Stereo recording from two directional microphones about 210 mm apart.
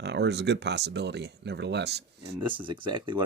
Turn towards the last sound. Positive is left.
turn(degrees=-25)  # may be behind; listen again after turning